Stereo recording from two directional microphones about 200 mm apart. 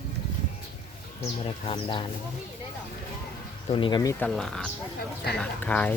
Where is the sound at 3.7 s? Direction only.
25° left (ahead or behind).